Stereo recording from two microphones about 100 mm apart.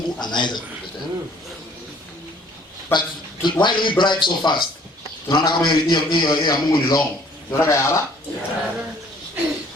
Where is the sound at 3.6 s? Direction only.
50° left (ahead or behind).